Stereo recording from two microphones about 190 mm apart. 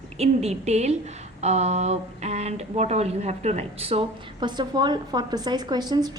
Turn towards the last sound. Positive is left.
turn(degrees=-20)  # may be behind; listen again after turning